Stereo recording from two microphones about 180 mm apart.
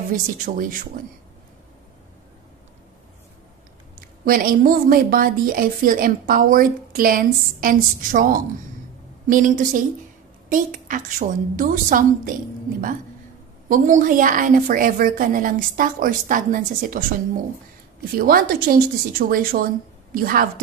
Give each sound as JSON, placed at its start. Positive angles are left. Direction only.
{"t": 0.1, "sound": "a woman's voice", "side_deg": -50}
{"t": 3.9, "sound": "a woman's voice", "side_deg": -55}
{"t": 13.7, "sound": "a woman's voice", "side_deg": -45}
{"t": 18.1, "sound": "a woman's voice", "side_deg": -55}